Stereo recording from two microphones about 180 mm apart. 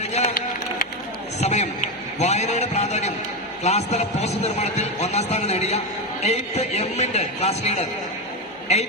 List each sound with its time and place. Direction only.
0.2 s run: 40° left (ahead or behind)
1.4 s a man's voice: 40° left (ahead or behind)